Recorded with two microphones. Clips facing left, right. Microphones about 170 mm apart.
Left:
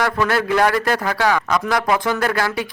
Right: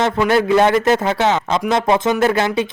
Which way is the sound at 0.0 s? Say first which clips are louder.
Right 4 dB; 20° right (ahead or behind).